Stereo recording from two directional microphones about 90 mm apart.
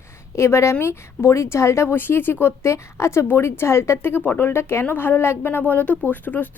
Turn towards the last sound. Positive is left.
turn(degrees=20)  # may be behind; listen again after turning